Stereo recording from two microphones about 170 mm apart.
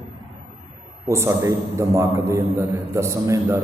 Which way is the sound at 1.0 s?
15° right (ahead or behind).